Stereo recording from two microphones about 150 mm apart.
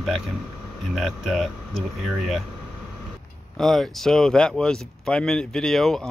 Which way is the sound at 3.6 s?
Centre (ahead or behind).